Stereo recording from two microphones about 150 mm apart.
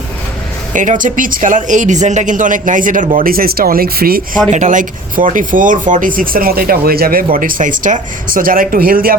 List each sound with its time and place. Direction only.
0.7 s speech: 60° right (ahead or behind); by 4.2 s 85° right
4.5 s speech: 55° right (ahead or behind); by 9.1 s 75° right (ahead or behind)